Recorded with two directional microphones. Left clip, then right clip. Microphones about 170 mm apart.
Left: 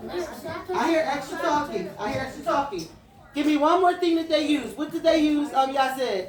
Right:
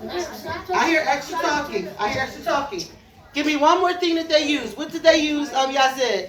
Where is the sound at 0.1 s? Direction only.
20° right (ahead or behind).